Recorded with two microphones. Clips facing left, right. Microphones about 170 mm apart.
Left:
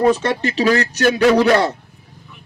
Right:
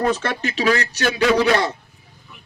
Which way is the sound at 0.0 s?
20° left (ahead or behind).